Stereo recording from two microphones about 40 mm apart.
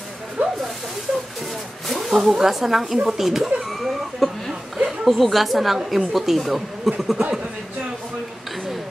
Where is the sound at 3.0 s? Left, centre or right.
Centre.